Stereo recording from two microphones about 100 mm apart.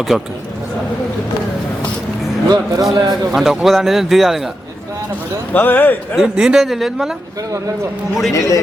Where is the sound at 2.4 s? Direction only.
40° right (ahead or behind).